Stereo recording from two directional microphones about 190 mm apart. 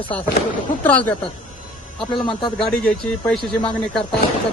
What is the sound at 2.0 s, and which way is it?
Speech, centre (ahead or behind).